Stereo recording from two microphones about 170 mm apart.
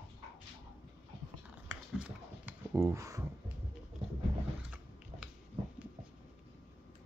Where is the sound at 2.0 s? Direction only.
5° right (ahead or behind).